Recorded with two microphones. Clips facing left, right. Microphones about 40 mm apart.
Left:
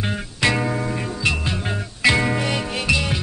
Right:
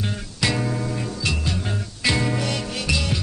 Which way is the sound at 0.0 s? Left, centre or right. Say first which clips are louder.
Left 4 dB; left.